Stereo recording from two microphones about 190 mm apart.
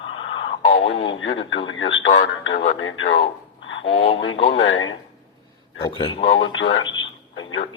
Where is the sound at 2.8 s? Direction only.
90° left.